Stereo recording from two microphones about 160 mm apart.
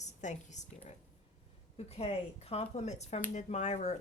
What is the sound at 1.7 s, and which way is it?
Speech, 40° left (ahead or behind).